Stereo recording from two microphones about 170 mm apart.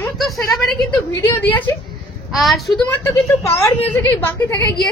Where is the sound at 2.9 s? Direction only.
15° left (ahead or behind).